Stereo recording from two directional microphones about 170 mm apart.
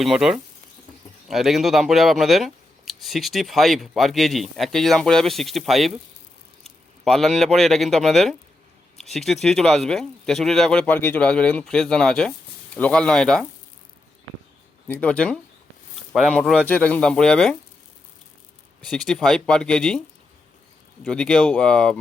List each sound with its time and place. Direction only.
0.0 s speech: centre (ahead or behind)
7.0 s speech: centre (ahead or behind)
14.8 s speech: 10° left (ahead or behind)
18.9 s speech: 5° left (ahead or behind)
21.0 s speech: 5° left (ahead or behind)